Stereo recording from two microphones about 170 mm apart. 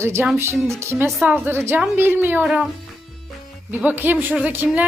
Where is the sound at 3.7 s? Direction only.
10° right (ahead or behind).